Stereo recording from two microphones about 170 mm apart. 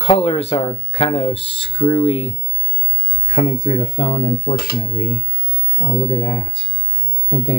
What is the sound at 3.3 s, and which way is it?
Speech, 50° left (ahead or behind).